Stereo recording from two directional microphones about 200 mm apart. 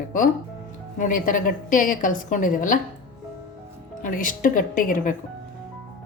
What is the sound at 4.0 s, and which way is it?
A woman's voice, 40° left (ahead or behind).